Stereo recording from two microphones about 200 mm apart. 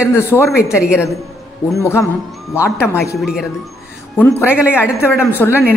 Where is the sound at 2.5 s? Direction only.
10° left (ahead or behind).